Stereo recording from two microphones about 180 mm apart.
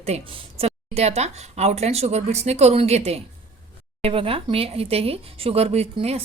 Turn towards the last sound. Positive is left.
turn(degrees=-35)  # may be behind; listen again after turning